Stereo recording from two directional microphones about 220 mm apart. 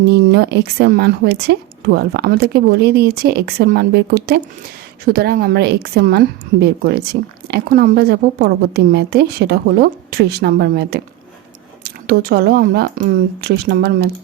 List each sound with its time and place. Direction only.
0.1 s a woman's voice: 50° right (ahead or behind)